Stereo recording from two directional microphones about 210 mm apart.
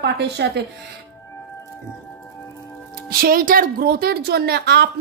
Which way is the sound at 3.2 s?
45° right (ahead or behind).